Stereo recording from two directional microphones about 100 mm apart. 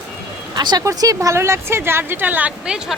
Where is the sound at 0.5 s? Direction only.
45° right (ahead or behind).